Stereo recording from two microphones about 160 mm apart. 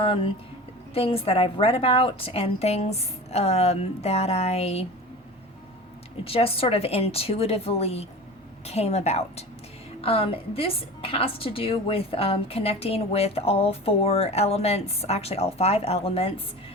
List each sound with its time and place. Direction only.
0.0 s a woman's voice: 35° left (ahead or behind)
6.2 s a woman's voice: 35° left (ahead or behind)